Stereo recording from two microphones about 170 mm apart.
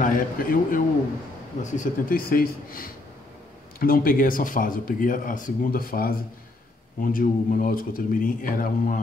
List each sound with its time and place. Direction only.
0.0 s speech: 55° left (ahead or behind)